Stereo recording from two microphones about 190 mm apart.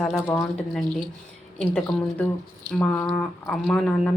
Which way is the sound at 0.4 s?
Centre (ahead or behind).